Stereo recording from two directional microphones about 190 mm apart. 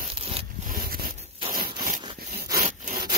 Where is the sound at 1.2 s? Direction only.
25° right (ahead or behind).